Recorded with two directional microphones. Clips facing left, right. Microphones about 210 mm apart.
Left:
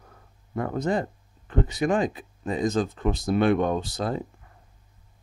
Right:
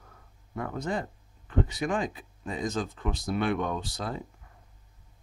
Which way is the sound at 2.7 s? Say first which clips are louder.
Left 7 dB; 40° left (ahead or behind).